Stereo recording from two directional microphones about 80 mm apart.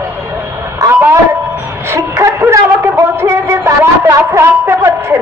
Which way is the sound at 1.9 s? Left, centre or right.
Right.